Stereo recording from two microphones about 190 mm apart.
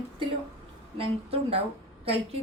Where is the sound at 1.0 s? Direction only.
30° right (ahead or behind).